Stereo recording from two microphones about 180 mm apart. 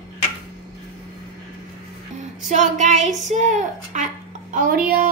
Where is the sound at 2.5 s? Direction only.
45° right (ahead or behind).